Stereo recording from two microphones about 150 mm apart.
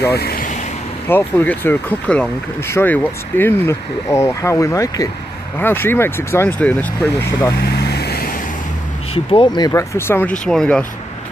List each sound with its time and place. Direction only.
0.0 s speech: 90° left
1.0 s speech: 15° left (ahead or behind)
7.5 s vehicle: 90° left
9.1 s speech: 40° left (ahead or behind)
9.6 s speech: 20° left (ahead or behind)
10.4 s speech: 5° left (ahead or behind)